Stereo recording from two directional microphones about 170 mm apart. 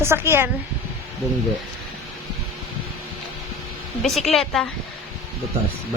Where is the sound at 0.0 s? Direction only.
15° right (ahead or behind).